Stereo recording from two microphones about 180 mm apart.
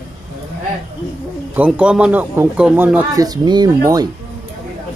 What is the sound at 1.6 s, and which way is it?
Speech, 5° right (ahead or behind).